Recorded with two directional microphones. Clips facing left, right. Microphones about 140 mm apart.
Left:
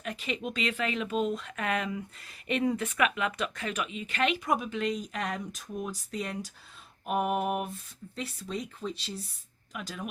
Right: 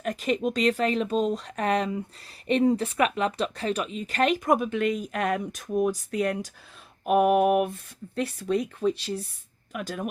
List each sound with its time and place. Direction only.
0.0 s a woman's voice: 45° right (ahead or behind)